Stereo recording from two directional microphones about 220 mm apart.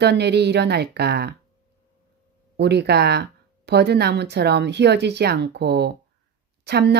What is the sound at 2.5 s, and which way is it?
A woman's voice, 50° right (ahead or behind).